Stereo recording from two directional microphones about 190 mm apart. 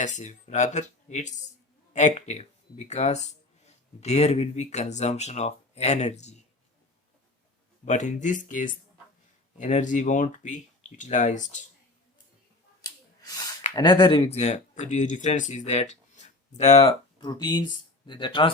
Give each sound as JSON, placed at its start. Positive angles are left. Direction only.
{"t": 0.0, "sound": "speech", "side_deg": 40}
{"t": 7.9, "sound": "speech", "side_deg": 40}
{"t": 12.8, "sound": "a sound", "side_deg": 20}
{"t": 13.7, "sound": "speech", "side_deg": 25}